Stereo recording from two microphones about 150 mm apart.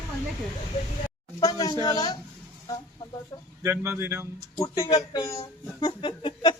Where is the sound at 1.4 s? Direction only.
25° left (ahead or behind).